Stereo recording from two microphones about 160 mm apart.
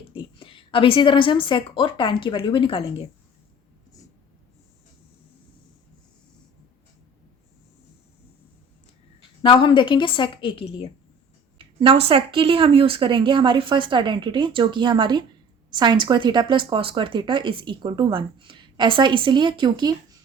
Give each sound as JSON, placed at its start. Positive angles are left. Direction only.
{"t": 0.1, "sound": "a woman's voice", "side_deg": 35}
{"t": 9.4, "sound": "a woman's voice", "side_deg": 30}
{"t": 11.5, "sound": "speech", "side_deg": -35}